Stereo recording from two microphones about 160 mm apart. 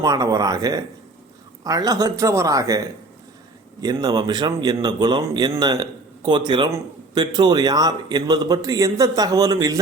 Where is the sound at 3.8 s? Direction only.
25° right (ahead or behind).